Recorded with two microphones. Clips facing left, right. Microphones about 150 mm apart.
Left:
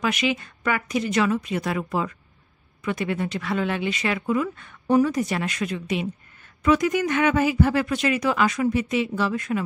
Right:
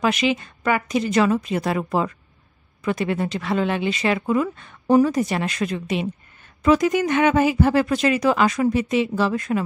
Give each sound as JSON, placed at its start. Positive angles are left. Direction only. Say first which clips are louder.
{"t": 0.0, "sound": "speech", "louder": "right 4 dB", "side_deg": -30}